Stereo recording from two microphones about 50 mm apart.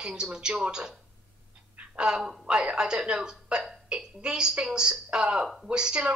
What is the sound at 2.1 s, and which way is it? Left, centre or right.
A woman's voice, centre.